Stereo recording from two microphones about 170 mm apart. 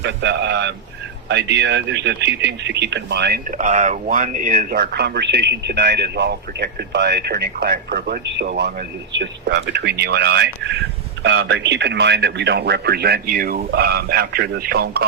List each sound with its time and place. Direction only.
0.0 s speech: 90° right
3.6 s speech: 45° right (ahead or behind); by 8.7 s 75° right (ahead or behind)
9.1 s speech: 90° right; by 15.0 s 65° right (ahead or behind)